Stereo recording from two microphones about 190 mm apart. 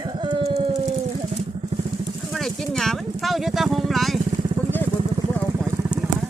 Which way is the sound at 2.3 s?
Centre (ahead or behind).